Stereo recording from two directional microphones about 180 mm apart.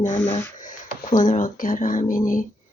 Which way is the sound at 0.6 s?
45° left (ahead or behind).